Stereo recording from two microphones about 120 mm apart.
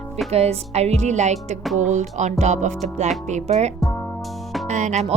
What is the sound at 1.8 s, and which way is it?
Music, 85° right.